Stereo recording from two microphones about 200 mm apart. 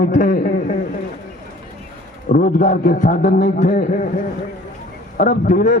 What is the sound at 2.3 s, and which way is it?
A man's voice, 40° left (ahead or behind).